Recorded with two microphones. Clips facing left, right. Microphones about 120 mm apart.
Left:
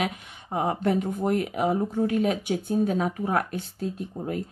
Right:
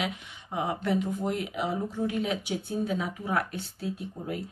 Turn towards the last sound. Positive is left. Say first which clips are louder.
# left 3 dB
turn(degrees=50)  # may be behind; listen again after turning